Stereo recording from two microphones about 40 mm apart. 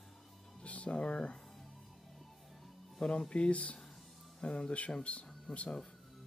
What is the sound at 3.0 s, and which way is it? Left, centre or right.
Speech, left.